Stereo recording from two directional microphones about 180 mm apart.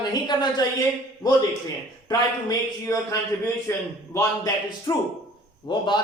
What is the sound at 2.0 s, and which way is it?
A man's voice, 20° left (ahead or behind).